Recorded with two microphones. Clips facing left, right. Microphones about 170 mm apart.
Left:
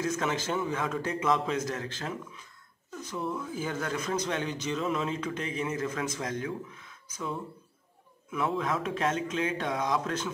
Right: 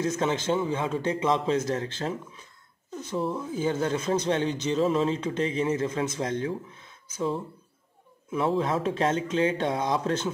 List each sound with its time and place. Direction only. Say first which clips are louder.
0.0 s speech: right 4 dB; 25° right (ahead or behind)